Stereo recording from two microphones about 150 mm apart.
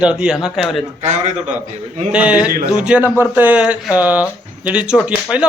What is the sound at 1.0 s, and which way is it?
Speech, 50° right (ahead or behind).